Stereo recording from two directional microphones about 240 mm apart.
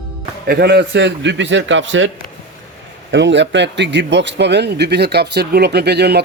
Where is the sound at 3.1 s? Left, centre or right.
Right.